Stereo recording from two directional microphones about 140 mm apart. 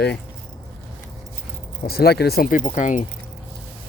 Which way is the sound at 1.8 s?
90° left.